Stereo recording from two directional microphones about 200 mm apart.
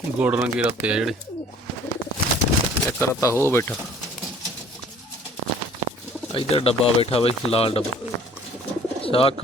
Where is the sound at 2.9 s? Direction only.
15° left (ahead or behind).